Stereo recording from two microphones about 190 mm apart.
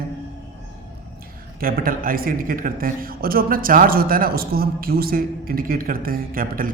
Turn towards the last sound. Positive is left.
turn(degrees=-50)  # may be behind; listen again after turning